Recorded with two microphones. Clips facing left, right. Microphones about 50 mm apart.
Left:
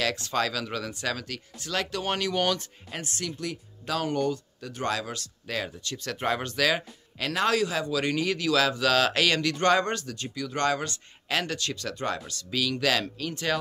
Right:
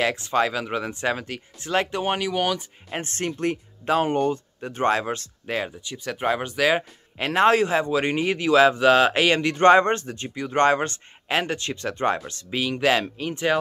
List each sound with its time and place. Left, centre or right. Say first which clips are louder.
0.0 s speech: right 5 dB; right
2.9 s speech: right 6 dB; right
5.9 s speech: right 3 dB; centre